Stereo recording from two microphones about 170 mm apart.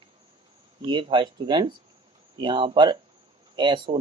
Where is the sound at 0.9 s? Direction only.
30° right (ahead or behind).